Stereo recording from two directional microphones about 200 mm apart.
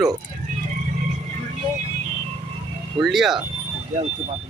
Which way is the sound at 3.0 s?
Centre (ahead or behind).